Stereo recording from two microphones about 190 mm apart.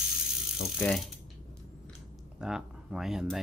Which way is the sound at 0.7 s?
5° left (ahead or behind).